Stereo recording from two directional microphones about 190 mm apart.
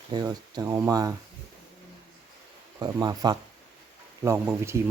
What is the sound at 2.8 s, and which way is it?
A man's voice, 20° right (ahead or behind).